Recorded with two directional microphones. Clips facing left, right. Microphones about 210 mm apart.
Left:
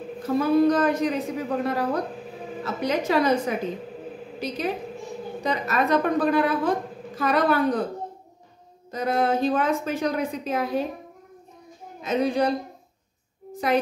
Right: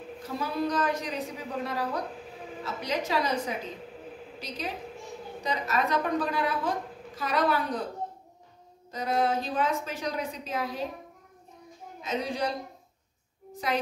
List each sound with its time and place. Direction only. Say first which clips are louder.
0.3 s a woman's voice: left 11 dB; 55° left (ahead or behind)
8.9 s a woman's voice: left 4 dB; 55° left (ahead or behind)
12.0 s a woman's voice: left 8 dB; 55° left (ahead or behind)